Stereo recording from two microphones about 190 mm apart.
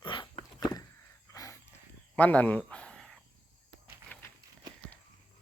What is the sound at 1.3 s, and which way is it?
Wild animals, 15° left (ahead or behind).